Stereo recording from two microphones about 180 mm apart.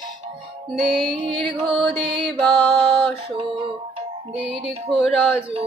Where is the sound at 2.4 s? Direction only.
25° right (ahead or behind).